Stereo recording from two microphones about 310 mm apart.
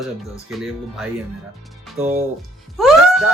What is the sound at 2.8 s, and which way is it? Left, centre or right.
Music, centre.